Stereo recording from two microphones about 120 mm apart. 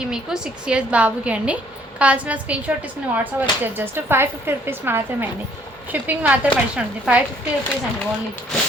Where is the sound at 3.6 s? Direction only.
15° right (ahead or behind).